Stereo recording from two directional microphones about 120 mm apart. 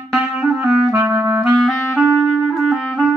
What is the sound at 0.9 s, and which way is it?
Clarinet, 25° right (ahead or behind).